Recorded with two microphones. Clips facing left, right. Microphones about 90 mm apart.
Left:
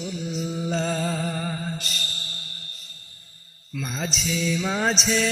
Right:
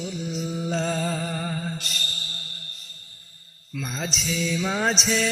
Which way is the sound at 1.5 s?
Centre (ahead or behind).